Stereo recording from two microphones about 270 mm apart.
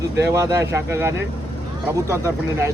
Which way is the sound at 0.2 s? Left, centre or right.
Centre.